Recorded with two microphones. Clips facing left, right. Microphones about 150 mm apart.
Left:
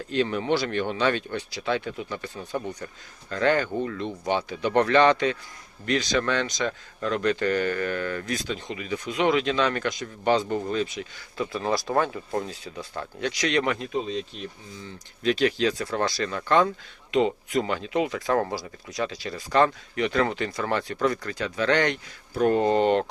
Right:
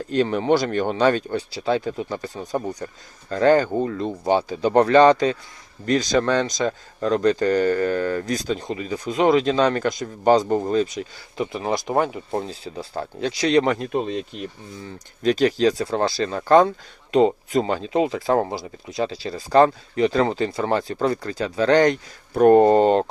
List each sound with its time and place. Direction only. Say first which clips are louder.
0.1 s speech: right 5 dB; 40° right (ahead or behind)
11.3 s speech: right 2 dB; 20° right (ahead or behind); by 14.2 s 55° right (ahead or behind)
15.2 s speech: right 5 dB; 40° right (ahead or behind)
22.4 s speech: right 8 dB; 50° right (ahead or behind)